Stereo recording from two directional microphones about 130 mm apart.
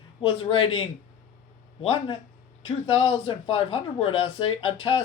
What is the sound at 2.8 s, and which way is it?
Speech, 45° left (ahead or behind).